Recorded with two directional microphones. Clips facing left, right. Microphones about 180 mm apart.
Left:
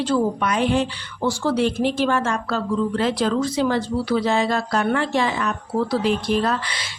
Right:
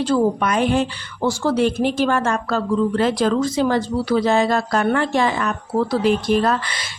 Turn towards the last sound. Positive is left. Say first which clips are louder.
# right 3 dB
turn(degrees=-50)  # may be behind; listen again after turning